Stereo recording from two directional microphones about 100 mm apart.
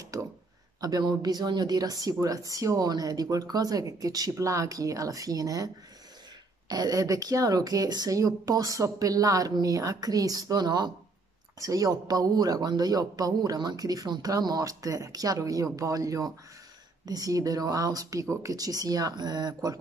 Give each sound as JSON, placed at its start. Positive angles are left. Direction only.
{"t": 0.1, "sound": "a woman's voice", "side_deg": -35}
{"t": 6.7, "sound": "a woman's voice", "side_deg": -40}